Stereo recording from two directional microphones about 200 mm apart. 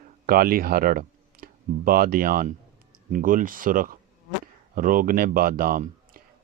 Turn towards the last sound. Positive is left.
turn(degrees=-45)  # may be behind; listen again after turning